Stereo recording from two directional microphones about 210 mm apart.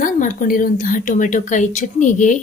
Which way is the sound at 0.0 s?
40° left (ahead or behind).